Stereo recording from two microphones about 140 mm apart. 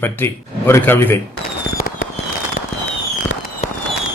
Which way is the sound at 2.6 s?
70° left (ahead or behind).